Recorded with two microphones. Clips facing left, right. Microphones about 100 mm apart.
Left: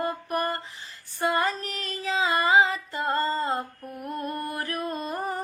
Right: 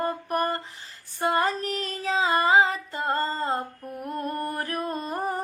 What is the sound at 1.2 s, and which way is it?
Female singing, 40° right (ahead or behind).